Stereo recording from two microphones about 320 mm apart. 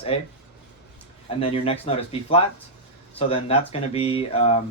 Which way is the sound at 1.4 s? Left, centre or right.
Centre.